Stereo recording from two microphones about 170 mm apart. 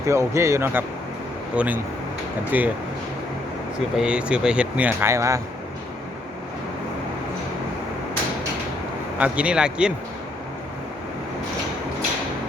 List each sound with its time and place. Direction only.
0.1 s speech: 15° right (ahead or behind)
3.9 s speech: 5° right (ahead or behind)
9.1 s speech: 5° right (ahead or behind)